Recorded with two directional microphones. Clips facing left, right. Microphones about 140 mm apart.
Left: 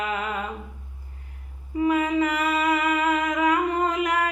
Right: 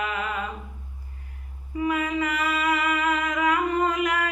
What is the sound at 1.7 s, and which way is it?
Humming, 25° left (ahead or behind).